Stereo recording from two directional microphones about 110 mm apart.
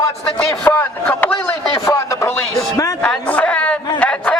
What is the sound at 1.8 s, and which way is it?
Radio, 25° left (ahead or behind).